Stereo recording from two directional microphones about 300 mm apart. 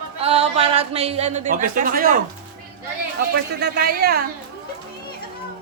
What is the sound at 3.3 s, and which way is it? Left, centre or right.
Speech, right.